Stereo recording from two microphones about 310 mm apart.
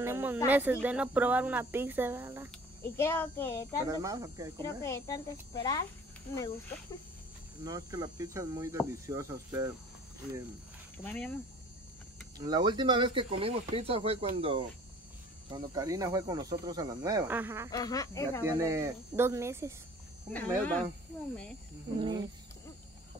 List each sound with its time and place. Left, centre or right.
0.0 s a sound: centre
0.5 s speech: centre
2.8 s speech: centre
3.8 s speech: centre
4.6 s speech: centre
7.6 s speech: centre
11.1 s speech: centre
12.4 s speech: centre
17.6 s speech: centre
18.6 s speech: centre
20.3 s speech: centre
21.9 s speech: centre